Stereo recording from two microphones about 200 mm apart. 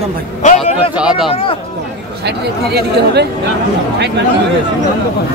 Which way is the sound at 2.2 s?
55° right (ahead or behind).